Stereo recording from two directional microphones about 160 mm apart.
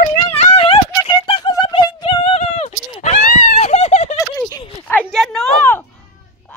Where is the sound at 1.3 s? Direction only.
25° left (ahead or behind).